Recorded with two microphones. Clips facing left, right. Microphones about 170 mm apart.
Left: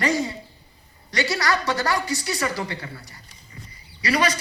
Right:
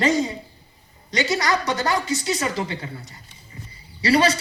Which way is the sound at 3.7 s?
30° right (ahead or behind).